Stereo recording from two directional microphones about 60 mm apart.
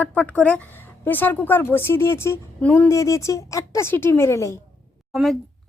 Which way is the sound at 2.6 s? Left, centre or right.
Left.